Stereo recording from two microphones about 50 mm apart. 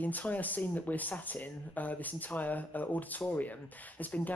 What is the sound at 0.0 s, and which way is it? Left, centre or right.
Speech, left.